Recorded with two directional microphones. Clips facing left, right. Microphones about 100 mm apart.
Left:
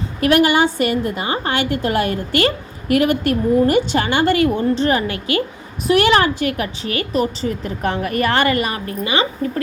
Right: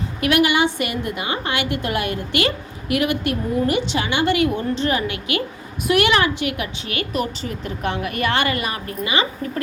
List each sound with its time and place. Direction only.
0.2 s a woman's voice: 40° left (ahead or behind)